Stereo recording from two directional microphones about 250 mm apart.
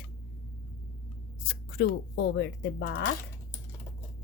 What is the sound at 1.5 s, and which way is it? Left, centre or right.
Speech, left.